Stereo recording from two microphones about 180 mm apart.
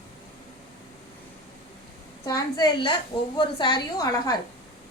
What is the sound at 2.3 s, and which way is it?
A woman's voice, 20° left (ahead or behind).